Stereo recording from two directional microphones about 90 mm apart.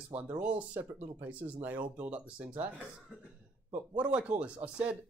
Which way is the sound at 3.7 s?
15° right (ahead or behind).